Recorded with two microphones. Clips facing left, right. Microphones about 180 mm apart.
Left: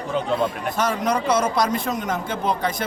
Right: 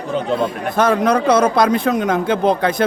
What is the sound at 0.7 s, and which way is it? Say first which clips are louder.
Speech: right 11 dB; 60° right (ahead or behind).